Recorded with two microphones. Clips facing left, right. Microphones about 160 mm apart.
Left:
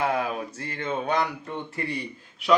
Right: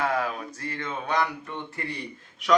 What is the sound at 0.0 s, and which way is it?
Speech, 20° left (ahead or behind).